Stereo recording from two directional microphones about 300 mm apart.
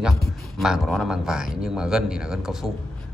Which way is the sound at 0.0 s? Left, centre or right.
Centre.